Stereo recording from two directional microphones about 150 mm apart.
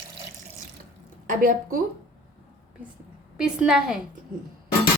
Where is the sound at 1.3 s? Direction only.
65° right (ahead or behind).